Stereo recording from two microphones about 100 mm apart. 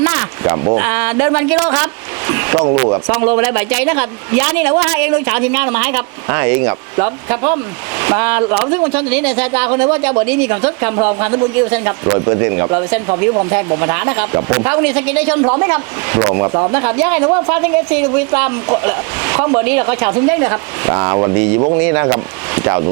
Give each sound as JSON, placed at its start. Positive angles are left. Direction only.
{"t": 0.0, "sound": "a sound", "side_deg": -25}
{"t": 0.9, "sound": "speech", "side_deg": -20}
{"t": 17.5, "sound": "speech", "side_deg": -20}